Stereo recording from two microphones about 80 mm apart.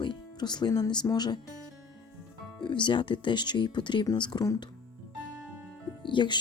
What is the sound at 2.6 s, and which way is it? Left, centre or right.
Speech, left.